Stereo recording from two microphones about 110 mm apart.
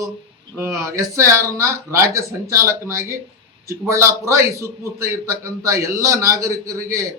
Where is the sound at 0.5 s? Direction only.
25° right (ahead or behind).